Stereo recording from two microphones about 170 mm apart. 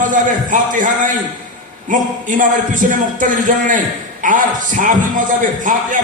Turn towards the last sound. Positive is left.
turn(degrees=-50)  # may be behind; listen again after turning